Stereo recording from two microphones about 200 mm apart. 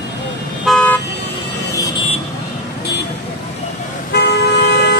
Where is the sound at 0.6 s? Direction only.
5° left (ahead or behind).